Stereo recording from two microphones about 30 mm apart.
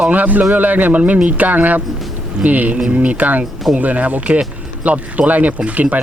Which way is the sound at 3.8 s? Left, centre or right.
Right.